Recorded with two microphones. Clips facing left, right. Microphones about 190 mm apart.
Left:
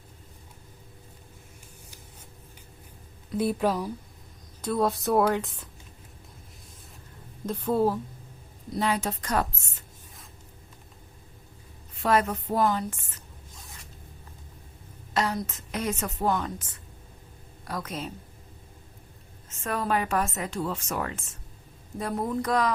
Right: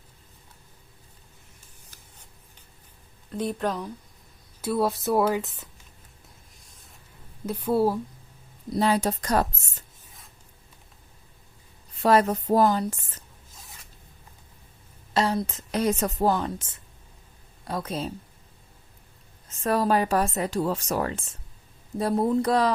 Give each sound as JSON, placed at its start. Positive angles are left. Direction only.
{"t": 3.3, "sound": "speech", "side_deg": 5}
{"t": 4.6, "sound": "a woman's voice", "side_deg": -5}
{"t": 7.4, "sound": "a woman's voice", "side_deg": -10}
{"t": 8.7, "sound": "a woman's voice", "side_deg": -35}
{"t": 12.0, "sound": "a woman's voice", "side_deg": -35}
{"t": 15.1, "sound": "a woman's voice", "side_deg": -30}
{"t": 19.5, "sound": "a woman's voice", "side_deg": -35}